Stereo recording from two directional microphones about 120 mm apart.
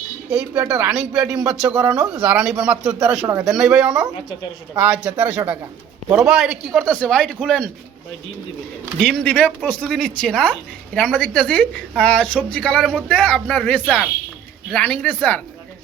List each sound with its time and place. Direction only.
0.3 s a man's voice: 10° right (ahead or behind)
6.8 s speech: 10° left (ahead or behind)
9.0 s speech: 10° left (ahead or behind)